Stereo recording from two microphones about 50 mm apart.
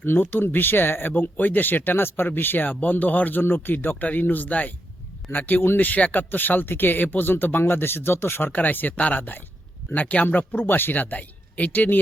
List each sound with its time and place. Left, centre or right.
0.0 s speech: left
2.6 s speech: left
10.3 s speech: left